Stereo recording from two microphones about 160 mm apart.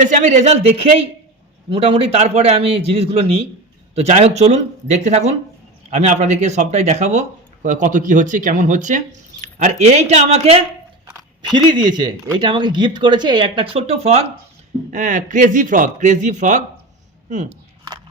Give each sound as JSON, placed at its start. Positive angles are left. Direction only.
{"t": 0.0, "sound": "a man's voice", "side_deg": -50}
{"t": 11.5, "sound": "speech", "side_deg": -30}
{"t": 14.8, "sound": "speech", "side_deg": -50}